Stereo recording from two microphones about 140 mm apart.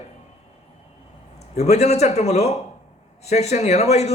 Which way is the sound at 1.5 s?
50° left (ahead or behind).